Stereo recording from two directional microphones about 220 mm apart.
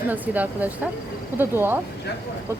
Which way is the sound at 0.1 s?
5° right (ahead or behind).